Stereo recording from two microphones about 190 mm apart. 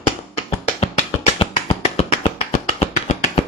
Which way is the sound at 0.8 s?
35° left (ahead or behind).